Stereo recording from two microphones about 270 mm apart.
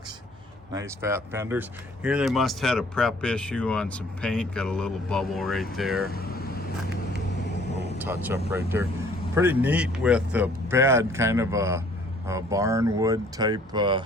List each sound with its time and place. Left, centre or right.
0.7 s speech: centre
6.1 s speech: left
8.0 s speech: centre